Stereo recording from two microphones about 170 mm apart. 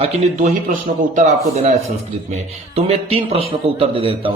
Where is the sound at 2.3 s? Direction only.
40° right (ahead or behind).